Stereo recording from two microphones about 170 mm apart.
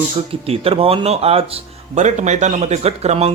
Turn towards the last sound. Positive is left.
turn(degrees=-40)  # may be behind; listen again after turning